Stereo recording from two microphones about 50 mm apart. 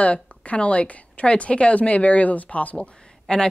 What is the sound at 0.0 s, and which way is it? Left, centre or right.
A woman's voice, left.